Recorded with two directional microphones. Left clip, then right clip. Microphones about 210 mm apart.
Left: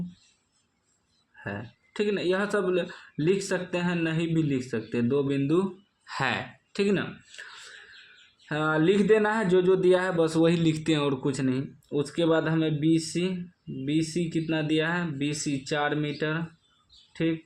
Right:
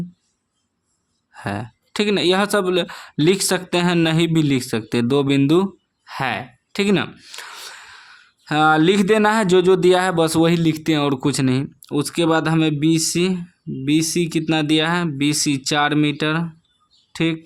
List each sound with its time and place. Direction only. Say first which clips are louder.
1.5 s speech: right 9 dB; 45° right (ahead or behind)
6.1 s speech: right 5 dB; 25° right (ahead or behind); by 17.3 s 50° right (ahead or behind)